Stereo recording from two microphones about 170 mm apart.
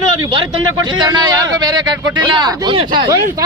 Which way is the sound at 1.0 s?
25° right (ahead or behind).